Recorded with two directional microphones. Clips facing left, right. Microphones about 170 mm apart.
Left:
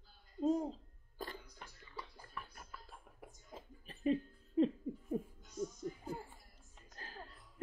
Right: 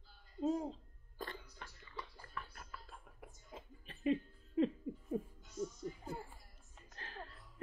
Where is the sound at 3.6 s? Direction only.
40° left (ahead or behind).